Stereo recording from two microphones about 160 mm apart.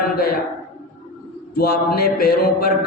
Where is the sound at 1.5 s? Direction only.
75° left (ahead or behind).